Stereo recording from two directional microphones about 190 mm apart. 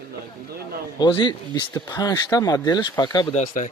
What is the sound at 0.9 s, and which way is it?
Speech, 25° left (ahead or behind).